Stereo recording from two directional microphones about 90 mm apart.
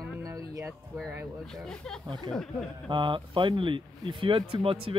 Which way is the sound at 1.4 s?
5° left (ahead or behind).